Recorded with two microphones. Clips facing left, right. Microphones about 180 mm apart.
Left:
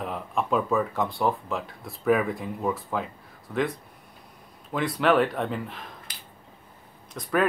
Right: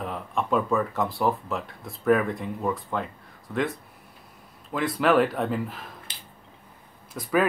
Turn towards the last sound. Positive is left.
turn(degrees=-5)  # may be behind; listen again after turning